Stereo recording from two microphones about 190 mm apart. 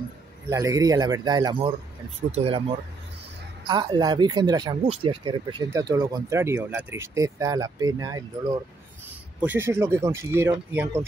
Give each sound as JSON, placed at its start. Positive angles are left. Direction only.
{"t": 0.5, "sound": "speech", "side_deg": -15}
{"t": 3.6, "sound": "speech", "side_deg": -25}